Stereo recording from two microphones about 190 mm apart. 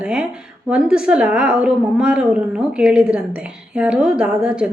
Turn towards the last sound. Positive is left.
turn(degrees=-5)  # may be behind; listen again after turning